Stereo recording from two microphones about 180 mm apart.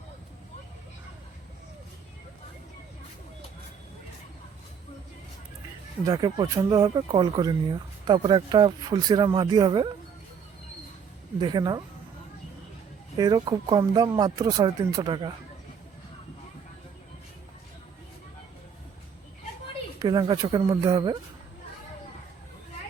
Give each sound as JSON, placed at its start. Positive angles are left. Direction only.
{"t": 6.1, "sound": "speech", "side_deg": -20}
{"t": 11.3, "sound": "speech", "side_deg": -25}
{"t": 13.1, "sound": "speech", "side_deg": -20}
{"t": 20.0, "sound": "speech", "side_deg": -25}